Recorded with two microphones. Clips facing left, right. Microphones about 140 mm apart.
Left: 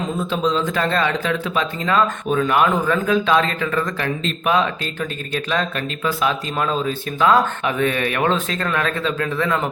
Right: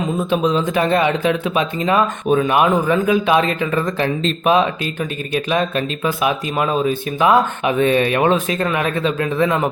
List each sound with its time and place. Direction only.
0.2 s speech: 15° right (ahead or behind)